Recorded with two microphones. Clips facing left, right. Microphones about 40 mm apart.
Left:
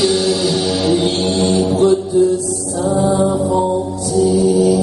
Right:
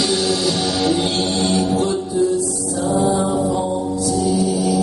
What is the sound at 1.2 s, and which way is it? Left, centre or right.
Mantra, centre.